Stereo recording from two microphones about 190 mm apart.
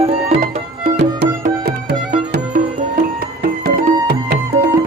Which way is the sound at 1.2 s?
60° right (ahead or behind).